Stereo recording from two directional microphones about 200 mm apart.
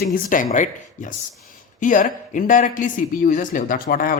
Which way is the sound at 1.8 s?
40° left (ahead or behind).